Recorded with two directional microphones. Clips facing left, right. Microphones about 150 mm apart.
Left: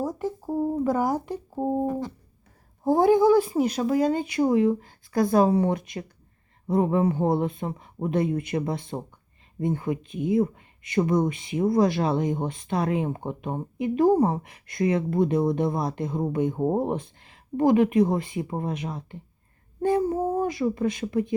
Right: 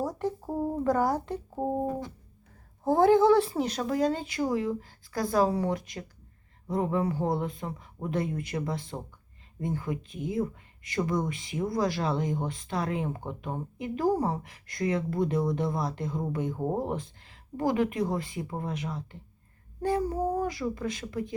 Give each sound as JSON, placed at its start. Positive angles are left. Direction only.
{"t": 0.0, "sound": "speech", "side_deg": 5}
{"t": 2.8, "sound": "speech", "side_deg": 15}